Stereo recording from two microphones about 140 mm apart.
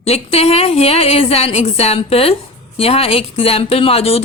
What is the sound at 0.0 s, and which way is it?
A woman's voice, 45° left (ahead or behind).